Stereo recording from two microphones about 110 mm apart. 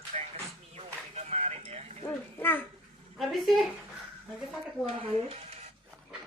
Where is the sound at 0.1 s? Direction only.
80° right.